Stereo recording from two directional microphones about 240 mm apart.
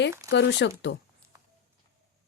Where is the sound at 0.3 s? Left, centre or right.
Left.